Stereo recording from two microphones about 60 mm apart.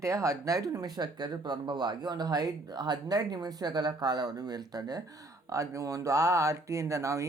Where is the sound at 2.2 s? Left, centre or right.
Right.